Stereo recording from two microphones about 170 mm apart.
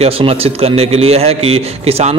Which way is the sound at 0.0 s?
35° right (ahead or behind).